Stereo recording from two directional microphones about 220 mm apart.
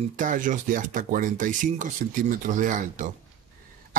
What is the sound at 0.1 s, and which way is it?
Speech, 35° right (ahead or behind).